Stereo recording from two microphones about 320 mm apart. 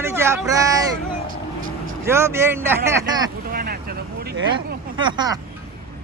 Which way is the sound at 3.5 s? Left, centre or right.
Right.